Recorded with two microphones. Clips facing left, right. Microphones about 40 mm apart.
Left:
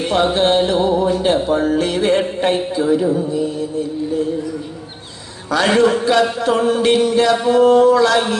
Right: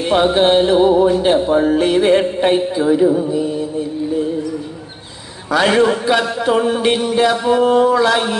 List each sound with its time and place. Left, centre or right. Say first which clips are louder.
0.1 s music: right 3 dB; centre
5.5 s a man's voice: right 1 dB; centre